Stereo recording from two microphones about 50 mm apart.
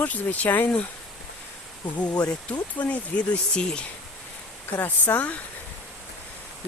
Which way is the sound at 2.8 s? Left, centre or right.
Left.